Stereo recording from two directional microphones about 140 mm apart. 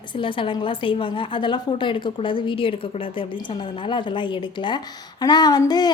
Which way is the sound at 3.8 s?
35° left (ahead or behind).